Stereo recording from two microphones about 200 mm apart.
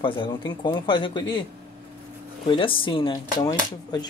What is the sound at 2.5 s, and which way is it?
Speech, 25° left (ahead or behind).